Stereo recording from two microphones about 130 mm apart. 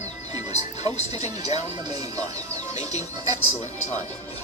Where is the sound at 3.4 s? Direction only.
60° left (ahead or behind).